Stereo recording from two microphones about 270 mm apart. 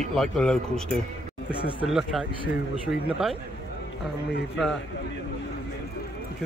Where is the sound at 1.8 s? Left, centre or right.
Centre.